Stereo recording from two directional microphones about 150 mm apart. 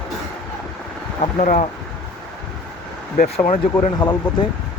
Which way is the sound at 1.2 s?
55° left (ahead or behind).